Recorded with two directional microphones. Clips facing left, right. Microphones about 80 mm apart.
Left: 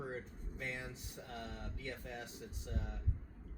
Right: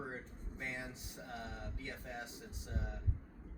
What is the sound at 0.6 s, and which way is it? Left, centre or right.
Speech, right.